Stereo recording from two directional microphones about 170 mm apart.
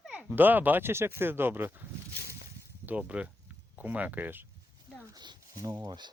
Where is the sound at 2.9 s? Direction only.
5° right (ahead or behind).